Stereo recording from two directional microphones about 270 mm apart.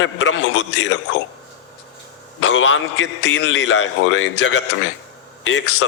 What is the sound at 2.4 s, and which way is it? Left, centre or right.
A man's voice, left.